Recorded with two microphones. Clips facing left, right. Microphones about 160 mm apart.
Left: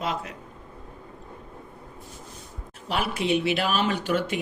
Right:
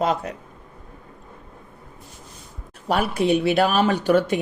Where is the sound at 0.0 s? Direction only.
40° right (ahead or behind).